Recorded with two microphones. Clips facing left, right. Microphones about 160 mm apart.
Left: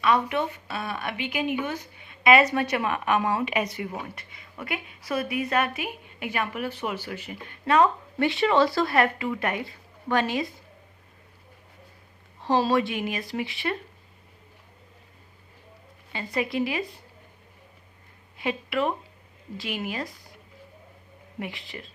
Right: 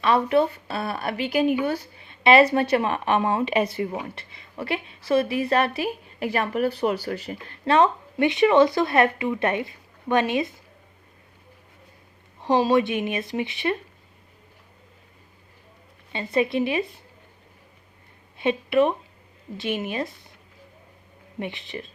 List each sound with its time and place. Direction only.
0.0 s speech: 35° right (ahead or behind)
12.4 s speech: 15° right (ahead or behind)
16.1 s speech: 25° right (ahead or behind)
18.3 s speech: 25° right (ahead or behind)
21.3 s speech: 25° right (ahead or behind)